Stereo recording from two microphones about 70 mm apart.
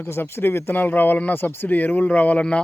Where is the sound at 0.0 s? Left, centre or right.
Left.